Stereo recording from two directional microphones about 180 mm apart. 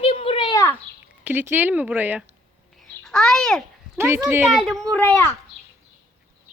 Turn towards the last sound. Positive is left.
turn(degrees=10)  # may be behind; listen again after turning